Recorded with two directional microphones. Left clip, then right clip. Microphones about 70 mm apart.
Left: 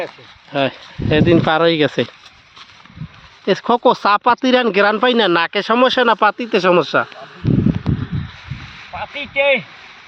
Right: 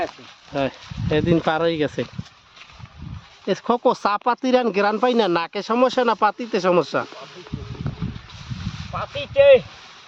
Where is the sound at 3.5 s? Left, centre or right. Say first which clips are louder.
Left 6 dB; left.